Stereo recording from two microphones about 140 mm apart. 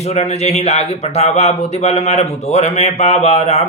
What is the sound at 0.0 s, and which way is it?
Speech, 50° left (ahead or behind).